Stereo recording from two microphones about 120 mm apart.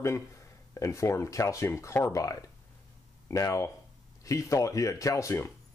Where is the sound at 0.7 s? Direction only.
25° left (ahead or behind).